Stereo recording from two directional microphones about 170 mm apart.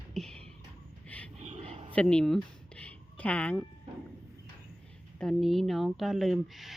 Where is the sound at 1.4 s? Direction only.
40° right (ahead or behind).